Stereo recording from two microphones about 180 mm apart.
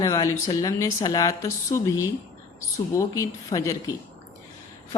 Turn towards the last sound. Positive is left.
turn(degrees=20)  # may be behind; listen again after turning